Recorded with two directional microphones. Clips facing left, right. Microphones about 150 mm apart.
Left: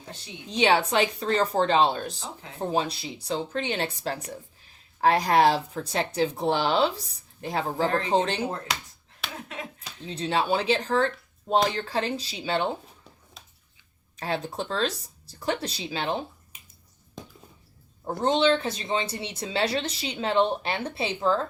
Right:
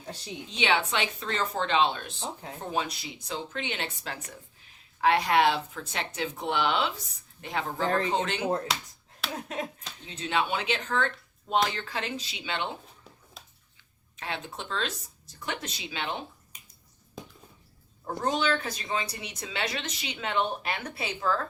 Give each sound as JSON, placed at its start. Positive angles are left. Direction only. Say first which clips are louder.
{"t": 0.5, "sound": "speech", "louder": "left 6 dB", "side_deg": 40}
{"t": 9.5, "sound": "finger snapping", "louder": "right 5 dB", "side_deg": -40}
{"t": 10.1, "sound": "speech", "louder": "left 4 dB", "side_deg": 35}
{"t": 13.4, "sound": "a sound", "louder": "right 3 dB", "side_deg": 0}
{"t": 14.2, "sound": "speech", "louder": "left 7 dB", "side_deg": 40}
{"t": 18.0, "sound": "speech", "louder": "left 6 dB", "side_deg": 25}